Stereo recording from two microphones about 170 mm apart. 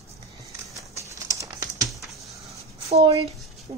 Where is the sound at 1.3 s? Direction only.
20° right (ahead or behind).